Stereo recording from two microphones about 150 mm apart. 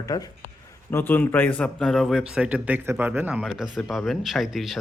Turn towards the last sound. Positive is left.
turn(degrees=0)  # may be behind; listen again after turning